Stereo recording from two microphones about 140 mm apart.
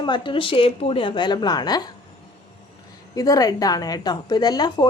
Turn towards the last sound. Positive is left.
turn(degrees=30)  # may be behind; listen again after turning